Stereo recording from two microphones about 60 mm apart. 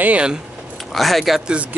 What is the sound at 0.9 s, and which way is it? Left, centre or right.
Speech, centre.